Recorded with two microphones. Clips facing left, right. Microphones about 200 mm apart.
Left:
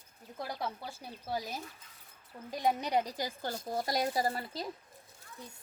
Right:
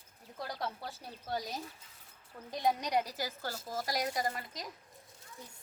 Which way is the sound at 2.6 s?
15° left (ahead or behind).